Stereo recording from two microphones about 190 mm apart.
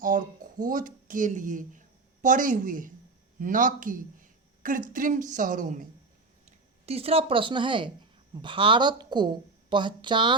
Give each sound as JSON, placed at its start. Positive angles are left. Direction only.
{"t": 0.6, "sound": "speech", "side_deg": -45}
{"t": 6.8, "sound": "a woman's voice", "side_deg": -30}